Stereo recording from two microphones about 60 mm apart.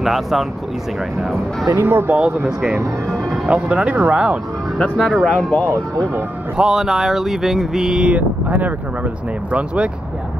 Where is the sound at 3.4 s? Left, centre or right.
Centre.